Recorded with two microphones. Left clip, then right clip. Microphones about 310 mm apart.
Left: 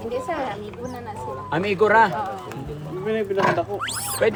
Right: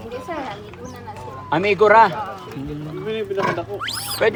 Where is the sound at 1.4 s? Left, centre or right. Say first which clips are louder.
Right 5 dB; centre.